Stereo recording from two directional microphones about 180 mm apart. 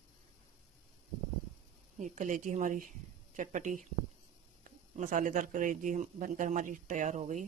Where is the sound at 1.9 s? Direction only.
40° right (ahead or behind).